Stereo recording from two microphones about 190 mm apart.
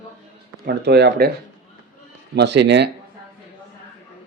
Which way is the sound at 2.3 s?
65° right (ahead or behind).